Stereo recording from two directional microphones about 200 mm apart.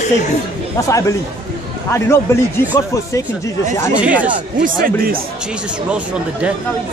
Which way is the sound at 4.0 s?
5° right (ahead or behind).